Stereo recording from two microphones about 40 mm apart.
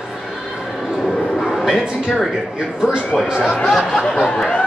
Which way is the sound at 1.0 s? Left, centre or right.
Centre.